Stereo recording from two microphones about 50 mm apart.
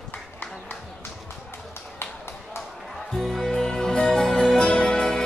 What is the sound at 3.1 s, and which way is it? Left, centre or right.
Music, centre.